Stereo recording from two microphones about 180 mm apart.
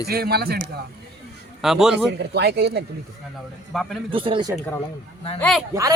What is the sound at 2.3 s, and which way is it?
Speech, 65° right (ahead or behind).